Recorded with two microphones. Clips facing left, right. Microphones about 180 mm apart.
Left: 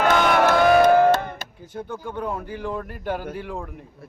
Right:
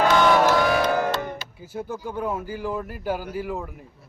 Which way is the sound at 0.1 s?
55° left (ahead or behind).